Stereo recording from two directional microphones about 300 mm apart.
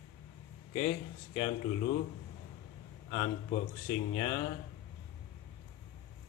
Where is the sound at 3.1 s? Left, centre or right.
Centre.